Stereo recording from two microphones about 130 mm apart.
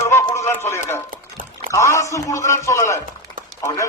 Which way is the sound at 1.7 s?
20° left (ahead or behind).